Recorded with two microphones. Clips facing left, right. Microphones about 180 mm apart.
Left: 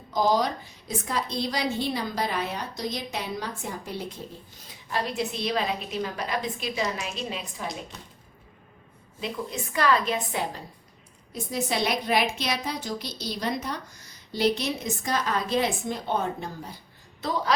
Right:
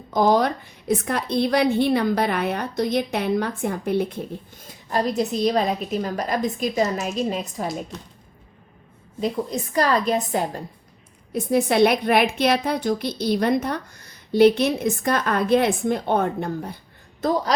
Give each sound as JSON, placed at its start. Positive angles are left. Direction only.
{"t": 0.1, "sound": "a woman's voice", "side_deg": -55}
{"t": 4.6, "sound": "a woman's voice", "side_deg": -45}
{"t": 9.2, "sound": "a woman's voice", "side_deg": -40}
{"t": 11.3, "sound": "a woman's voice", "side_deg": -55}